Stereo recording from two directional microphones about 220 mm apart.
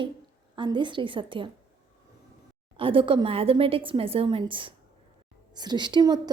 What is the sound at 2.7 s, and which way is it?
A woman's voice, 25° right (ahead or behind).